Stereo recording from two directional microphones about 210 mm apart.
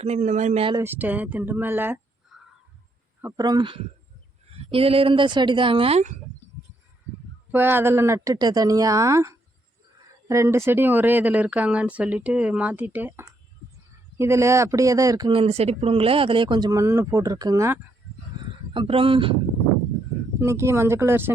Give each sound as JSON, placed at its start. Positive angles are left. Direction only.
{"t": 0.0, "sound": "speech", "side_deg": -30}
{"t": 0.8, "sound": "speech", "side_deg": -10}
{"t": 7.5, "sound": "speech", "side_deg": -10}
{"t": 20.4, "sound": "speech", "side_deg": -15}